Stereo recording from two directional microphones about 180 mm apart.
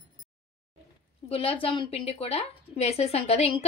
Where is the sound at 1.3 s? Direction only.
30° left (ahead or behind).